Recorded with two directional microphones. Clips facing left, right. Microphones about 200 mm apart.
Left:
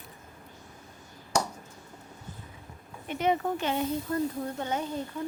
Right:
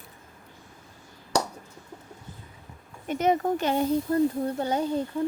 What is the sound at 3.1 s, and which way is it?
Speech, 45° right (ahead or behind).